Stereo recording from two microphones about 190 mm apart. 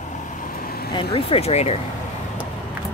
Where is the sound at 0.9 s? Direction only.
30° left (ahead or behind).